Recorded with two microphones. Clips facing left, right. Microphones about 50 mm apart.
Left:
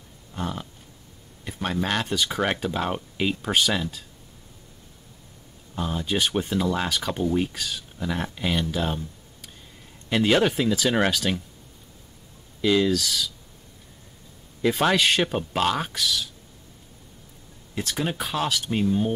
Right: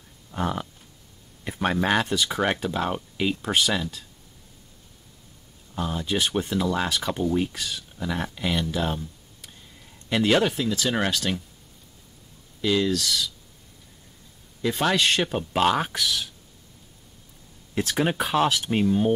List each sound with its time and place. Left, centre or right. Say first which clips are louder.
0.3 s a sound: right 4 dB; centre
2.0 s speech: right 1 dB; centre
5.8 s speech: even; centre
10.0 s speech: left 1 dB; centre
12.6 s speech: left 2 dB; centre
14.8 s speech: left 1 dB; centre
15.5 s speech: right 4 dB; centre
15.9 s speech: even; right
17.7 s speech: right 4 dB; centre